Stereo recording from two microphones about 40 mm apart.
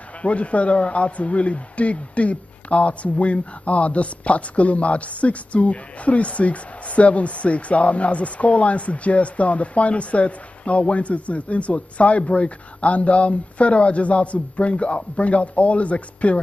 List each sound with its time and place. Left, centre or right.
0.2 s speech: left